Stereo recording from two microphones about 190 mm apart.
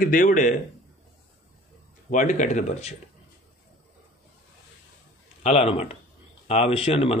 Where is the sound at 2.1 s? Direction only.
40° left (ahead or behind).